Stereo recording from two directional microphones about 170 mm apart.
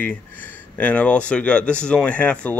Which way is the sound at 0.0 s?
10° left (ahead or behind).